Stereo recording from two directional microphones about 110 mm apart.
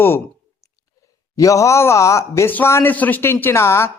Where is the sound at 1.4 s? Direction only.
30° left (ahead or behind).